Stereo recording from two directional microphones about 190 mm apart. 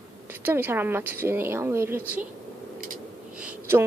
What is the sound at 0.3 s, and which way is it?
A woman's voice, 10° right (ahead or behind).